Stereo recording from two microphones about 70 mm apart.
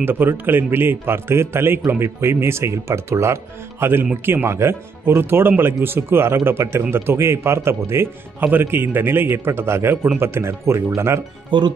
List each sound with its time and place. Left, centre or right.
0.0 s a man's voice: right
11.5 s speech: right